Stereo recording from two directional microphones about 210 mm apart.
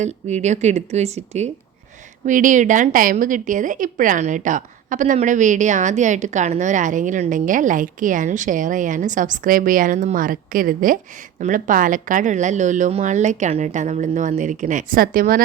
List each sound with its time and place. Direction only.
0.0 s a woman's voice: 35° right (ahead or behind)